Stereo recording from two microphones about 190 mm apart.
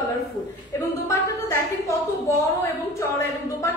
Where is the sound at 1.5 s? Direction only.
15° left (ahead or behind).